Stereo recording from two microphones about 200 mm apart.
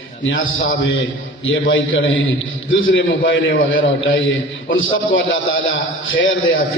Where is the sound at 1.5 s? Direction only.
75° left (ahead or behind).